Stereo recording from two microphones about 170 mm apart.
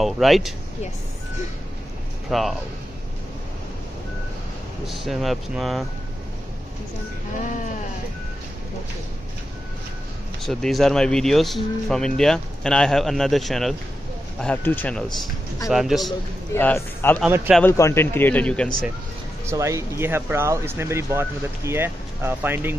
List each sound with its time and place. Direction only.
0.0 s speech: centre (ahead or behind)
2.2 s speech: centre (ahead or behind)
4.8 s speech: centre (ahead or behind)
10.4 s a man's voice: centre (ahead or behind)
15.7 s speech: centre (ahead or behind)
16.5 s a man's voice: 15° left (ahead or behind)
19.4 s speech: 15° right (ahead or behind)